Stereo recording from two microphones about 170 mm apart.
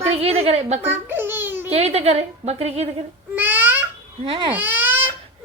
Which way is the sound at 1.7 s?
40° right (ahead or behind).